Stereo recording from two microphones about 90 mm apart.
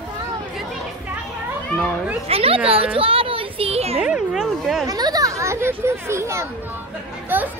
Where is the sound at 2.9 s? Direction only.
90° right.